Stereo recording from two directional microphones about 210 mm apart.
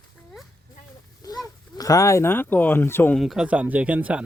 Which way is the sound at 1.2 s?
15° left (ahead or behind).